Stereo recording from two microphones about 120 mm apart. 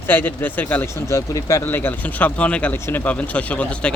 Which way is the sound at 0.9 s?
25° left (ahead or behind).